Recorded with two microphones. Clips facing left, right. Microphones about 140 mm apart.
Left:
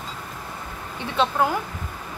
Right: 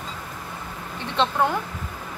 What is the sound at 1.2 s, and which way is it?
Speech, 5° left (ahead or behind).